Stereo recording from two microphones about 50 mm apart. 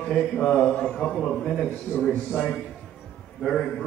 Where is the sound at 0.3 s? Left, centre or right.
Centre.